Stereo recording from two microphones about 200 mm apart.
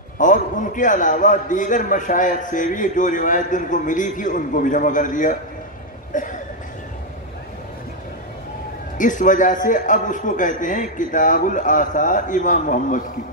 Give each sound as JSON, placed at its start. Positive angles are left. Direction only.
{"t": 0.2, "sound": "a man's voice", "side_deg": 40}
{"t": 6.1, "sound": "a sound", "side_deg": 40}
{"t": 8.9, "sound": "a man's voice", "side_deg": 40}